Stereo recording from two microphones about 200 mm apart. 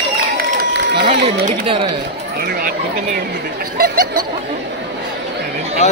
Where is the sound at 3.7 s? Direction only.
50° right (ahead or behind).